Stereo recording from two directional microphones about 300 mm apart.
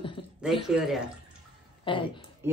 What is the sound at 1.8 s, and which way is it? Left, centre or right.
Speech, centre.